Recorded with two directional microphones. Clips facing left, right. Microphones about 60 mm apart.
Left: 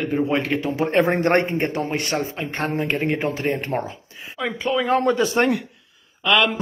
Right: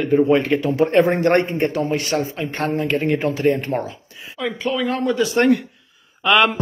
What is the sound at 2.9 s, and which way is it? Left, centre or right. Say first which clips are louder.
Speech: right 3 dB; left.